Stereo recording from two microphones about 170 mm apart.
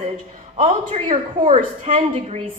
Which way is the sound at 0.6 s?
40° right (ahead or behind).